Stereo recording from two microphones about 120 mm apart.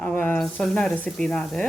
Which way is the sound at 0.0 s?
15° left (ahead or behind).